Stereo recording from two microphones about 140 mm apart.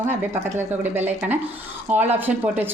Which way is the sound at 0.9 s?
15° right (ahead or behind).